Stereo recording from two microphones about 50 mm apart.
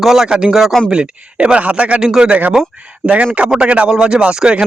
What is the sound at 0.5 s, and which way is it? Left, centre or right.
Speech, centre.